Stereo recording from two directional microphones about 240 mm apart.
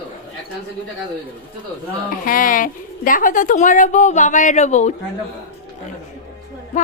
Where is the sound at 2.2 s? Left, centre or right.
Left.